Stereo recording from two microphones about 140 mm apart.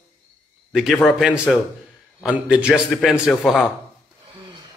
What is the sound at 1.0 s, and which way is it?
A man's voice, 5° right (ahead or behind).